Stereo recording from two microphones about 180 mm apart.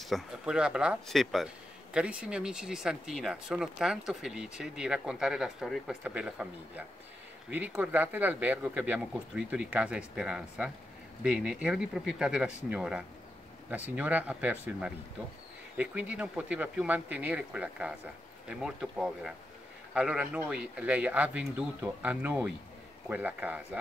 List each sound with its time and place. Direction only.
0.0 s speech: centre (ahead or behind)